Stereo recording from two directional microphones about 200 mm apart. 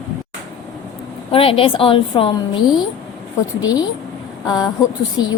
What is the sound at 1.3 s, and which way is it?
A woman's voice, 30° left (ahead or behind).